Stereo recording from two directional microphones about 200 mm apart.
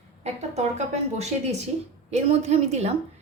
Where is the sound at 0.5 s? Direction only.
35° right (ahead or behind).